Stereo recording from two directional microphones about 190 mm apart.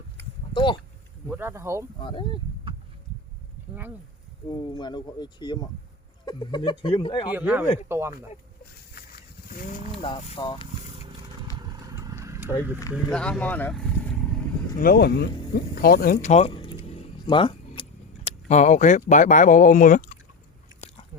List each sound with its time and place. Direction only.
0.5 s a sound: 25° left (ahead or behind)
1.3 s speech: 10° right (ahead or behind)
2.0 s speech: 25° left (ahead or behind)
4.4 s speech: 25° left (ahead or behind)
7.3 s speech: 10° right (ahead or behind)
9.0 s wild animals: 50° left (ahead or behind)
10.0 s speech: 30° left (ahead or behind)
11.5 s vehicle: 20° right (ahead or behind)
13.1 s speech: 5° left (ahead or behind)
14.8 s speech: 55° left (ahead or behind); by 16.7 s 25° left (ahead or behind)
16.9 s keys jangling: 25° left (ahead or behind); by 20.1 s 45° left (ahead or behind)